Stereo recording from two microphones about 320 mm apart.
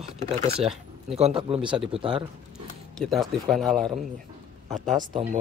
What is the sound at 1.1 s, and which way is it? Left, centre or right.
Speech, centre.